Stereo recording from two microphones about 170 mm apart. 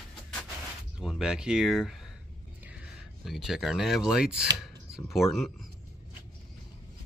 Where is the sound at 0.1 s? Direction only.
5° left (ahead or behind).